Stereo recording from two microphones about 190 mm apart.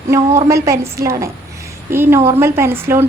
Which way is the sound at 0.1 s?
15° right (ahead or behind).